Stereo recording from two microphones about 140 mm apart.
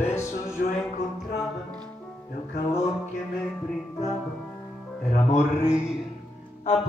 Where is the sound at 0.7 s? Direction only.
55° left (ahead or behind).